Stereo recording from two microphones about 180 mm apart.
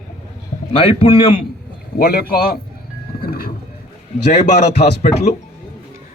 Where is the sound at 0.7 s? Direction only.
30° left (ahead or behind).